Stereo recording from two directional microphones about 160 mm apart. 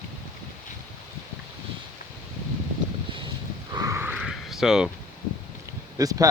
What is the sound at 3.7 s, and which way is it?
Wheeze, 20° right (ahead or behind).